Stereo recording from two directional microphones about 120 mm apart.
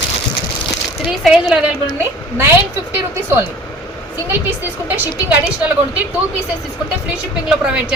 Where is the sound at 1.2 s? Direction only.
5° right (ahead or behind).